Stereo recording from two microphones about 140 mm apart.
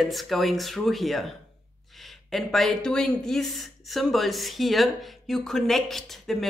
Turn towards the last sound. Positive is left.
turn(degrees=0)  # may be behind; listen again after turning